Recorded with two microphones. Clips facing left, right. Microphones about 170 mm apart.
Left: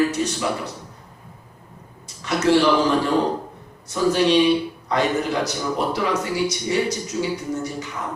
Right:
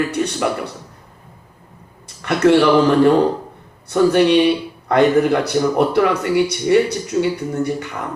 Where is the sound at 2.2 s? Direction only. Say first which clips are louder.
Right 5 dB; 60° right (ahead or behind).